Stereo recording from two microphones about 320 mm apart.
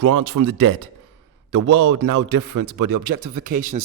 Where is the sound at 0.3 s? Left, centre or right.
Right.